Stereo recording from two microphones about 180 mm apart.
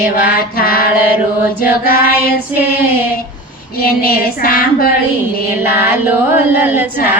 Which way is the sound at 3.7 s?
55° left (ahead or behind).